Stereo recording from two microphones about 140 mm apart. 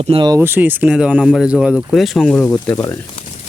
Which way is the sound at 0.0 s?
40° right (ahead or behind).